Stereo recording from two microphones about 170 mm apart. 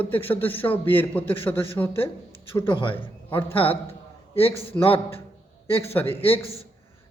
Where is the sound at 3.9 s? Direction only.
35° left (ahead or behind).